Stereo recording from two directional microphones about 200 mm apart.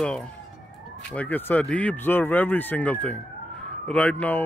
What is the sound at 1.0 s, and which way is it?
Speech, 5° left (ahead or behind).